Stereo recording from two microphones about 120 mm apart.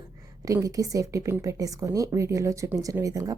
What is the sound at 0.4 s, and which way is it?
A woman's voice, 30° right (ahead or behind).